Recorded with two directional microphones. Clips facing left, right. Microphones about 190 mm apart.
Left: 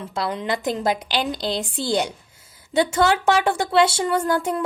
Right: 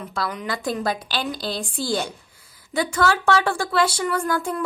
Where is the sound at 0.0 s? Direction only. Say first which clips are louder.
Left 2 dB; 25° left (ahead or behind).